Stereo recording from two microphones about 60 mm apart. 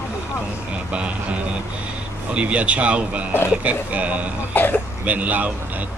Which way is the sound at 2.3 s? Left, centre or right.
Right.